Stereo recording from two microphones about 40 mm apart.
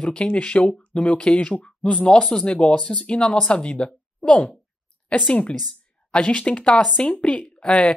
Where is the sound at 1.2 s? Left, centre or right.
Centre.